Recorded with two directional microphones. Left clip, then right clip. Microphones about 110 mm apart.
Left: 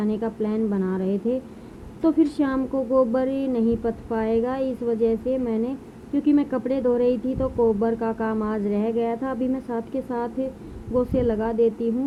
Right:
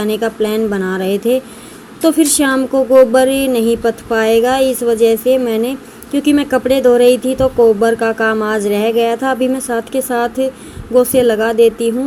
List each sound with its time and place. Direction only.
0.0 s speech: 25° right (ahead or behind)